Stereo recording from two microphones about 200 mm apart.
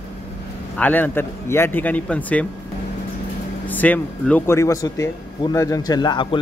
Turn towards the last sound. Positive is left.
turn(degrees=20)  # may be behind; listen again after turning